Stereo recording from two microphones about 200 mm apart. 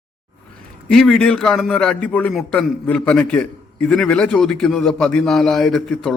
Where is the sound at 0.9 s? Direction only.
Centre (ahead or behind).